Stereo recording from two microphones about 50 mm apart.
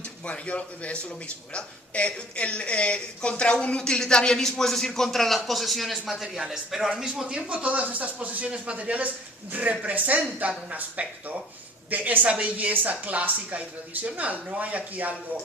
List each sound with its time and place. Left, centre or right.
0.3 s speech: left; by 7.3 s centre
7.3 s a woman's voice: right